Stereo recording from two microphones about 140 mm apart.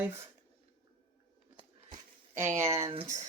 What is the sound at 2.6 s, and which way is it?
Speech, 20° right (ahead or behind).